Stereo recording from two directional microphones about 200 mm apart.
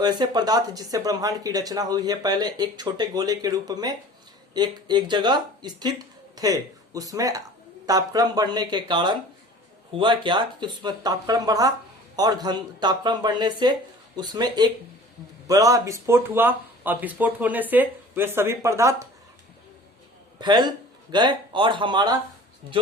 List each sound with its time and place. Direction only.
0.0 s speech: 20° right (ahead or behind)
20.4 s speech: 20° right (ahead or behind)